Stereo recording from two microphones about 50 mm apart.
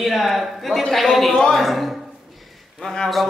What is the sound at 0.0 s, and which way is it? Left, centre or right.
A man's voice, centre.